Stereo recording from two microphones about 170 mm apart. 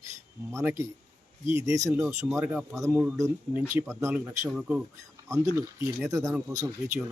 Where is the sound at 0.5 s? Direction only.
15° right (ahead or behind).